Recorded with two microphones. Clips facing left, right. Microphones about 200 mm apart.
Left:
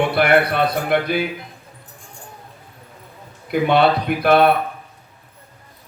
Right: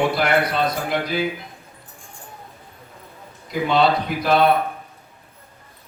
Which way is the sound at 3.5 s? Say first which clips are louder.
Left 3 dB; 60° left (ahead or behind).